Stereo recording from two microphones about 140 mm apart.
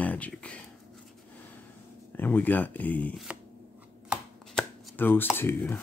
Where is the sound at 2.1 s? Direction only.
15° left (ahead or behind).